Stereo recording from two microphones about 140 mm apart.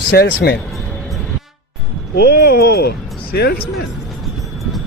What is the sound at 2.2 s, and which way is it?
Speech, 90° left.